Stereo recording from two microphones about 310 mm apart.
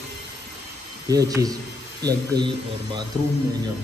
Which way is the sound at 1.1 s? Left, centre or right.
Centre.